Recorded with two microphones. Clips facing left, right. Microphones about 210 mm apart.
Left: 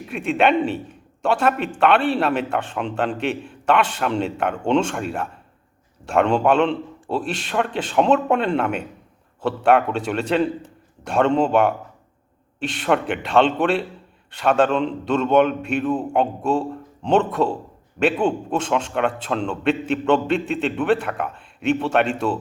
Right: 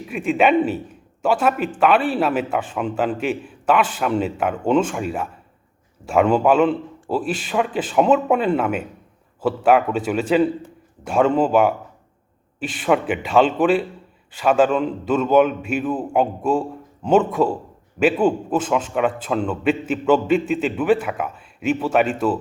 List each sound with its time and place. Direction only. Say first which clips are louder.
0.0 s a man's voice: right 1 dB; 5° right (ahead or behind)